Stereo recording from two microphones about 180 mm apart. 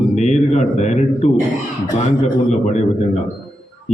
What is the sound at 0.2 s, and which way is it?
Speech, 40° left (ahead or behind).